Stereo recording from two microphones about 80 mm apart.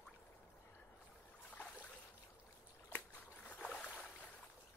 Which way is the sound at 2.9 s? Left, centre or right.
Centre.